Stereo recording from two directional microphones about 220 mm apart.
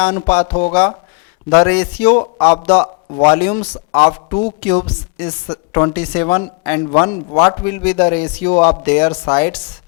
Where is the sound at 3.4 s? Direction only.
15° left (ahead or behind).